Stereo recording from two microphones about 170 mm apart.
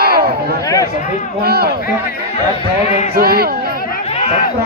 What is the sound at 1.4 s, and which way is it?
Speech, 65° right (ahead or behind).